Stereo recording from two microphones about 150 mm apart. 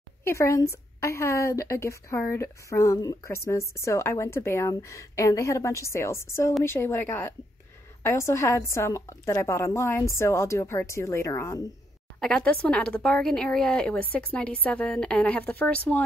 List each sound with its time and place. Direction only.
0.2 s speech: 20° left (ahead or behind)
12.2 s speech: 5° left (ahead or behind)